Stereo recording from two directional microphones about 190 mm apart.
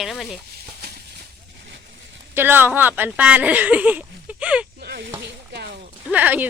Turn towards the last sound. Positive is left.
turn(degrees=-10)  # may be behind; listen again after turning